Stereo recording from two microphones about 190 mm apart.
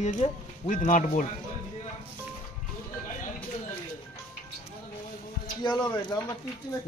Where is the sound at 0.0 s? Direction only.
40° left (ahead or behind).